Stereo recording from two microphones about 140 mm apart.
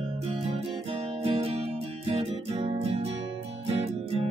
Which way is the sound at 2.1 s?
45° right (ahead or behind).